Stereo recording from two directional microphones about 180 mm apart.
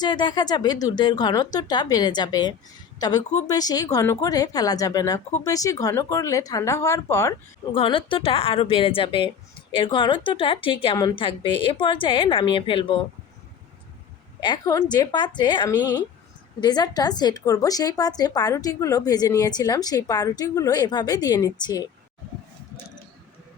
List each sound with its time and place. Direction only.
0.0 s a woman's voice: 25° left (ahead or behind)
7.7 s a woman's voice: 30° left (ahead or behind)
14.4 s a woman's voice: 20° left (ahead or behind)